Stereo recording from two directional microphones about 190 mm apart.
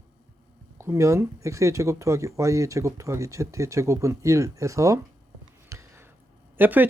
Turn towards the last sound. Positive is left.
turn(degrees=-10)  # may be behind; listen again after turning